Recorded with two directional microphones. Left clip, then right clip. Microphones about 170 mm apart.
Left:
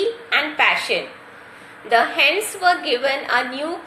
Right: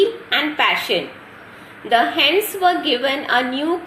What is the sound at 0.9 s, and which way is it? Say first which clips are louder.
Speech: right 2 dB; 45° right (ahead or behind).